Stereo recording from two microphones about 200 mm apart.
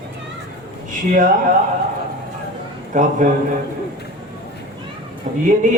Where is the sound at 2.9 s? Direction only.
40° right (ahead or behind).